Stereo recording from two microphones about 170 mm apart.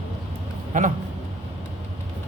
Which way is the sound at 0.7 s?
45° right (ahead or behind).